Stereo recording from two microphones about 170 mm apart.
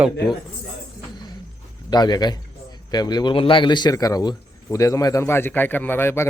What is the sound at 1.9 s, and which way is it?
A man's voice, 25° left (ahead or behind).